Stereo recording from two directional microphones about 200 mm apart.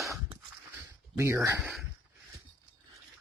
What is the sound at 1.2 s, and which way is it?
Speech, 15° right (ahead or behind).